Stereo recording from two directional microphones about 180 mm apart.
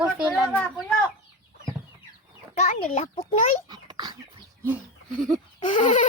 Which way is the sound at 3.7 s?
25° right (ahead or behind).